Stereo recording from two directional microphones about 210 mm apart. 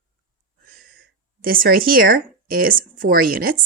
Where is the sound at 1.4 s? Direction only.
40° right (ahead or behind).